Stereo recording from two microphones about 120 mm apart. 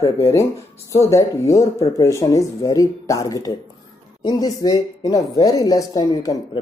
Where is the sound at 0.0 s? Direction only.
25° left (ahead or behind).